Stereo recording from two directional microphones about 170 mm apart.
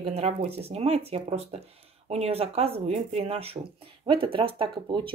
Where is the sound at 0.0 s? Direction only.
40° right (ahead or behind).